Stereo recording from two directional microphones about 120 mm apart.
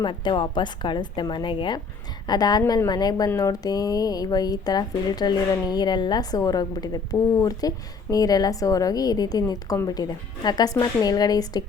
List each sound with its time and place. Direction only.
0.0 s a woman's voice: 40° left (ahead or behind)